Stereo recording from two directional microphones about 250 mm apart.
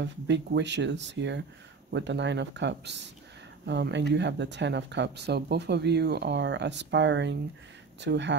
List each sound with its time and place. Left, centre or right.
0.0 s speech: right